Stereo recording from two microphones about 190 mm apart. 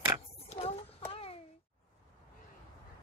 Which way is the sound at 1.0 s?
30° left (ahead or behind).